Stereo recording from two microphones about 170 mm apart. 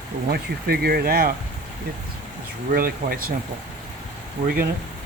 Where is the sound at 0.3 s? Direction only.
65° right (ahead or behind).